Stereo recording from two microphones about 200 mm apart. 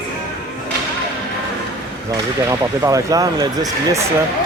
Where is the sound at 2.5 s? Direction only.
15° right (ahead or behind).